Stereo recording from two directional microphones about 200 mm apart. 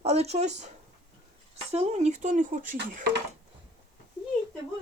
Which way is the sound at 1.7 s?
30° right (ahead or behind).